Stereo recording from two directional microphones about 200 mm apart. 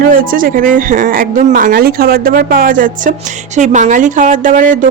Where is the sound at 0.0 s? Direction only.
45° right (ahead or behind).